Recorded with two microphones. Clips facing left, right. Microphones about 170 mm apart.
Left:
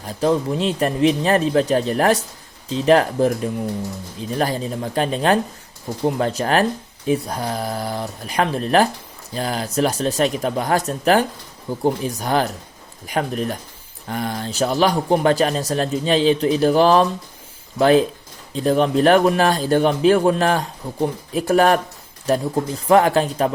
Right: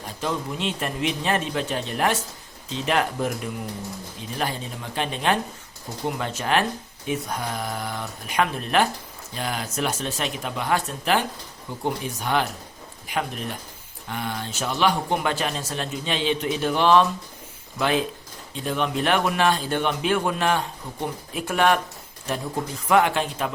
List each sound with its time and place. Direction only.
0.2 s speech: 35° left (ahead or behind)